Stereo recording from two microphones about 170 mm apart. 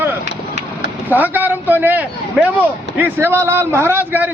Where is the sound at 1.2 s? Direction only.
10° right (ahead or behind).